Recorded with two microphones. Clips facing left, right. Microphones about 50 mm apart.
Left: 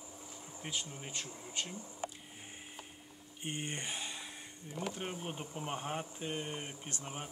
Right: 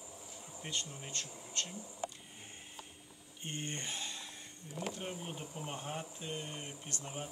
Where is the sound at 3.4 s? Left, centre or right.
Centre.